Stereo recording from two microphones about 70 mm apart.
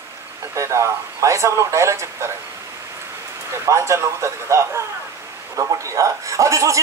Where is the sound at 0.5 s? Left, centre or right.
Right.